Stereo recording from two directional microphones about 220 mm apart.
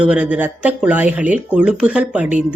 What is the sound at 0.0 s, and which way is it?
A woman's voice, 5° right (ahead or behind).